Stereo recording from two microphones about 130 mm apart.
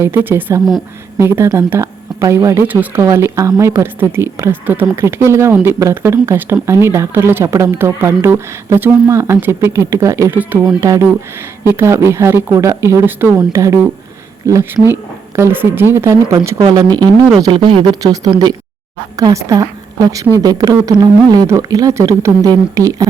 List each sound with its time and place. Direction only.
0.0 s a woman's voice: 15° right (ahead or behind)
17.3 s a woman's voice: 35° right (ahead or behind)